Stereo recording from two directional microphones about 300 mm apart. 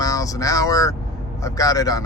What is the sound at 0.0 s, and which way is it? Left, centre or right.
Vehicle, centre.